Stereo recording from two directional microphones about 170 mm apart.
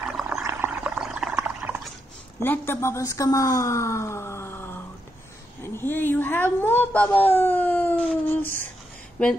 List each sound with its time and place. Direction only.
0.0 s a sound: 5° right (ahead or behind)
0.5 s pour: 10° right (ahead or behind)
2.4 s speech: 10° left (ahead or behind)